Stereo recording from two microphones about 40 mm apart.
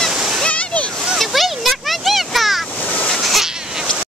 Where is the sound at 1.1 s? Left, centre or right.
Centre.